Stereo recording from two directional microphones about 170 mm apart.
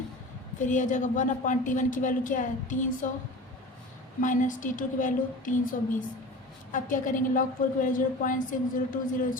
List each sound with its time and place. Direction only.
0.6 s a woman's voice: 50° left (ahead or behind)
4.2 s a woman's voice: 50° left (ahead or behind)